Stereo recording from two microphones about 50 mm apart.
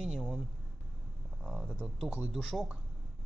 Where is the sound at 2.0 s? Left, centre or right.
Right.